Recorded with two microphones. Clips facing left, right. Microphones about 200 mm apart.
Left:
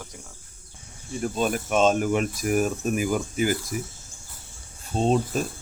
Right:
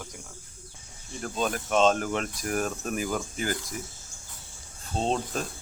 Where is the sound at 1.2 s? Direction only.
10° left (ahead or behind).